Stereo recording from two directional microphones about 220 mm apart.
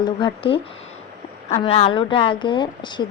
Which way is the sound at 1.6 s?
25° left (ahead or behind).